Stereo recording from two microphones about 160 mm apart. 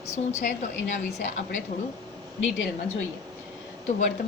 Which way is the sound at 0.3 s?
50° left (ahead or behind).